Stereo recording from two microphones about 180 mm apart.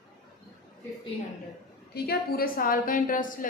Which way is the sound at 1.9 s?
60° left (ahead or behind).